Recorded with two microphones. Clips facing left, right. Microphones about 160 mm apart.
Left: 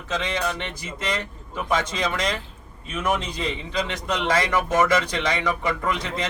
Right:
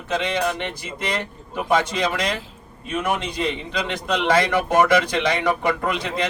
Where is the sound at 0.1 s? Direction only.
60° right (ahead or behind).